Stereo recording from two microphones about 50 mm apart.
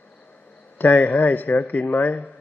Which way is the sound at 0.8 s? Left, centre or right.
Left.